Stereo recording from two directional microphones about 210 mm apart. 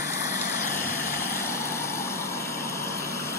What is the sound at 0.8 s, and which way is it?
Vehicle, 10° left (ahead or behind).